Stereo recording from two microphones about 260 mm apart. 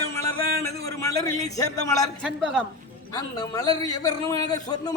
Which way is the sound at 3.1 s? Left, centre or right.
Centre.